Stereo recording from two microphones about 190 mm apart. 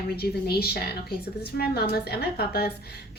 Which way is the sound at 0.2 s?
55° left (ahead or behind).